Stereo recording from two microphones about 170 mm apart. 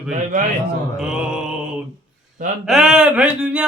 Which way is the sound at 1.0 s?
5° right (ahead or behind).